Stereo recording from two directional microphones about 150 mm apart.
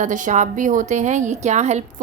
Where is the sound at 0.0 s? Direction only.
55° right (ahead or behind).